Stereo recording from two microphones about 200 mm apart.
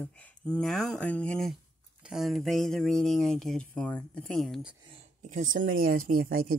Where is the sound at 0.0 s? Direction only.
5° left (ahead or behind).